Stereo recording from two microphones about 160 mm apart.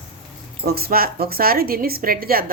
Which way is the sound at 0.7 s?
75° right (ahead or behind).